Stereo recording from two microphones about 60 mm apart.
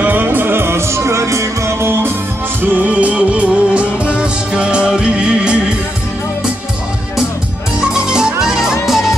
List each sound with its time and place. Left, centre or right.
0.0 s music: right
2.6 s music: right
7.9 s music: centre